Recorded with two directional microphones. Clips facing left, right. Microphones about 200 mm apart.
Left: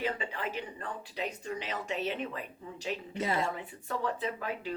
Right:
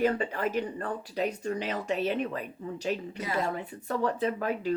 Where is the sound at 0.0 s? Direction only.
45° right (ahead or behind).